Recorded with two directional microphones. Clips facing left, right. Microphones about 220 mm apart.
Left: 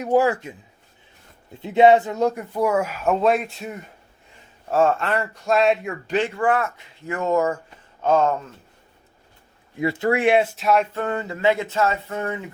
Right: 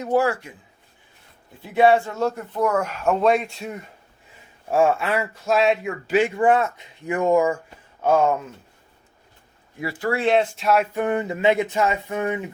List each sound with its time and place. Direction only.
0.0 s speech: 15° left (ahead or behind)
1.6 s speech: 20° left (ahead or behind); by 3.8 s centre (ahead or behind)
4.7 s speech: 10° right (ahead or behind)
9.7 s speech: 20° left (ahead or behind); by 10.8 s centre (ahead or behind)
10.9 s speech: 15° right (ahead or behind)